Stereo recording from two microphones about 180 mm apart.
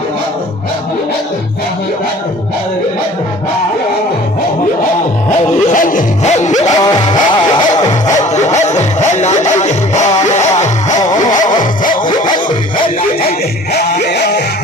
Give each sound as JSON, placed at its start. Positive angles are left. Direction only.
{"t": 5.7, "sound": "music", "side_deg": 50}
{"t": 6.7, "sound": "vehicle", "side_deg": 20}
{"t": 8.5, "sound": "music", "side_deg": 40}
{"t": 11.1, "sound": "vehicle", "side_deg": 20}
{"t": 11.6, "sound": "vehicle", "side_deg": 50}
{"t": 12.0, "sound": "dog", "side_deg": 25}
{"t": 13.7, "sound": "music", "side_deg": 65}